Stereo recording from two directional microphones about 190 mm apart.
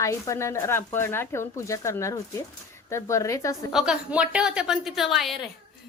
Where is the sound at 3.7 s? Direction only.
5° right (ahead or behind).